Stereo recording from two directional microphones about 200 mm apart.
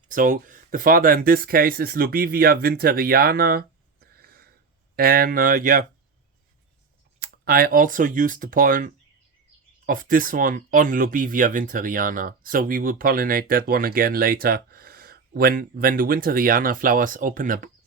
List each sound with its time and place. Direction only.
0.1 s speech: 40° right (ahead or behind)
7.2 s speech: 50° right (ahead or behind)